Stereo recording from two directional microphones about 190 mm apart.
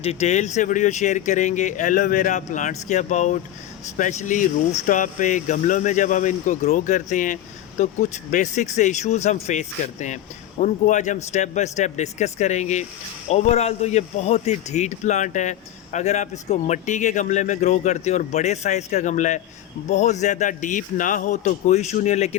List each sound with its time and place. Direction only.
0.0 s a man's voice: 35° left (ahead or behind)